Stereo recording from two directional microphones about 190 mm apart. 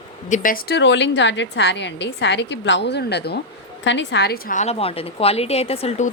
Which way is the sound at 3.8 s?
70° left (ahead or behind).